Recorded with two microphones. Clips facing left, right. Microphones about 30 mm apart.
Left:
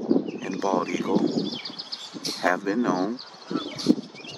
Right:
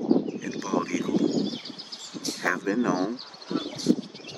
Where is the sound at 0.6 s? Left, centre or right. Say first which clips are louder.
Left 3 dB; left.